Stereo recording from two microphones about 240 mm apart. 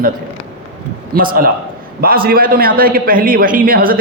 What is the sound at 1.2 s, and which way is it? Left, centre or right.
A man's voice, right.